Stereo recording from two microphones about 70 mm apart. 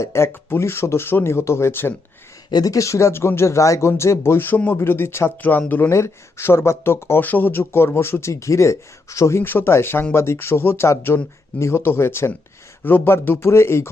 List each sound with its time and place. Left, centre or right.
0.0 s speech: left
2.5 s speech: left
5.4 s speech: left
5.9 s speech: left
9.4 s speech: left